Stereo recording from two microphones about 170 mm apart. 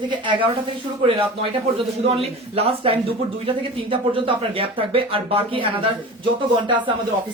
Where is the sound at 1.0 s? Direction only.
35° right (ahead or behind).